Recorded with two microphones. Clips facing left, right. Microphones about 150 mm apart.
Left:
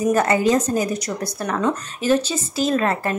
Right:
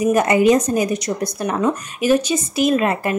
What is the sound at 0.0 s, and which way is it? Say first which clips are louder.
A woman's voice: right 3 dB; 15° right (ahead or behind).